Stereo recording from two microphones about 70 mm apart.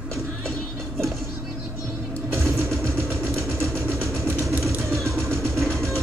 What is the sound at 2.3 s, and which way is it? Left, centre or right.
Vehicle, right.